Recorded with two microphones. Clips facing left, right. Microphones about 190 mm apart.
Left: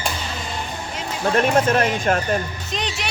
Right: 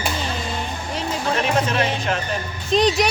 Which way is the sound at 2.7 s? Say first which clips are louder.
Right 13 dB; 35° right (ahead or behind).